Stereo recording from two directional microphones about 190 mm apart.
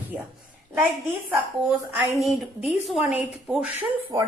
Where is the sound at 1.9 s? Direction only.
5° right (ahead or behind).